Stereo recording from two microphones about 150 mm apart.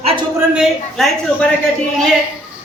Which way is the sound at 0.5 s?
Centre (ahead or behind).